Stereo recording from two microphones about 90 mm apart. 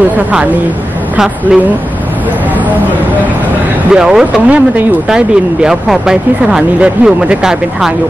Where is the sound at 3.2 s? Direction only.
15° right (ahead or behind).